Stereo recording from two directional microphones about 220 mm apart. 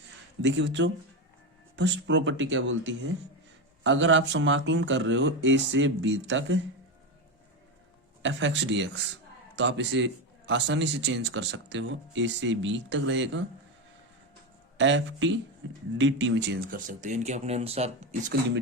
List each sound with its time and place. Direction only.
0.4 s a man's voice: 55° right (ahead or behind)
8.2 s a man's voice: 55° right (ahead or behind)
14.8 s a man's voice: 55° right (ahead or behind); by 18.3 s 35° right (ahead or behind)